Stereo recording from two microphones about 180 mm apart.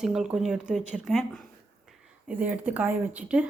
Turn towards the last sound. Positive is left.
turn(degrees=-10)  # may be behind; listen again after turning